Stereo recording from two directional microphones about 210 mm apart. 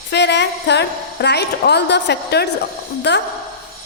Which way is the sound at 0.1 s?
55° left (ahead or behind).